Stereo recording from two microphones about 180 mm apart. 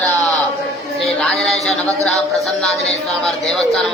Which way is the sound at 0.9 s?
Centre (ahead or behind).